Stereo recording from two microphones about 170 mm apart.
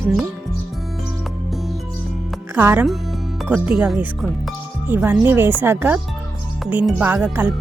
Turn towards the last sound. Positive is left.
turn(degrees=-10)  # may be behind; listen again after turning